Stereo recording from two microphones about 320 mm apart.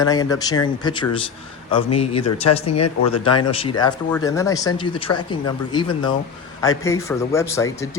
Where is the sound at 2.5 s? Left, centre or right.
Left.